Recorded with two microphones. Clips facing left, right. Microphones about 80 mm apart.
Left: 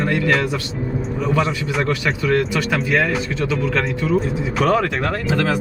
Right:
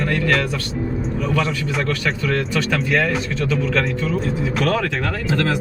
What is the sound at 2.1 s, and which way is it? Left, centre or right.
Speech, centre.